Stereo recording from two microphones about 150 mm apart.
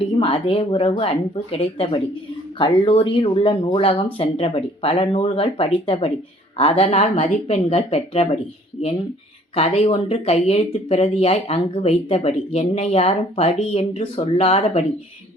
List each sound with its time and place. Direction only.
0.2 s speech: 40° left (ahead or behind)
9.6 s speech: 45° left (ahead or behind)